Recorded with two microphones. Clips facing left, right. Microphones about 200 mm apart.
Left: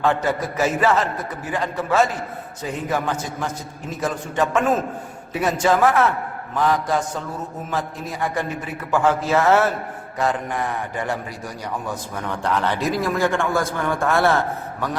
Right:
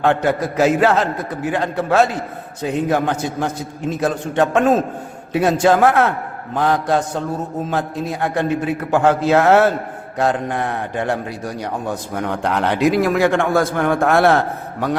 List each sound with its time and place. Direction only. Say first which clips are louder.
0.0 s a man's voice: right 4 dB; 65° right (ahead or behind)